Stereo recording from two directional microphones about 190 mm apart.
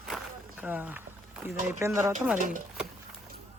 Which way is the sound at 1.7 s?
15° right (ahead or behind).